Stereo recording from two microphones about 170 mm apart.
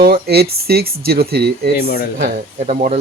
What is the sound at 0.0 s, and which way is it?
Speech, 65° right (ahead or behind).